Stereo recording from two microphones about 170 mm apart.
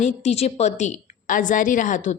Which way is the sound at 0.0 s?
40° left (ahead or behind).